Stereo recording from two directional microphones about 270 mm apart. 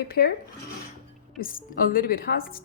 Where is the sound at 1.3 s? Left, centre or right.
Left.